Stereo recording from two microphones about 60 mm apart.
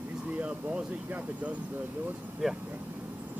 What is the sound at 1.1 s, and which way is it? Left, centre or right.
Speech, right.